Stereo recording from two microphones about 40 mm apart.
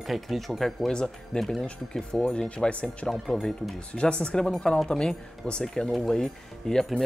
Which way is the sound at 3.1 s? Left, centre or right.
Centre.